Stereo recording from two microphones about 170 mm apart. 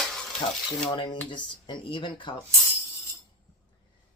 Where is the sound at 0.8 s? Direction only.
25° left (ahead or behind).